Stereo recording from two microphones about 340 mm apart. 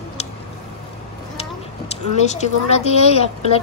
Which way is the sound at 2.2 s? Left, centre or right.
Centre.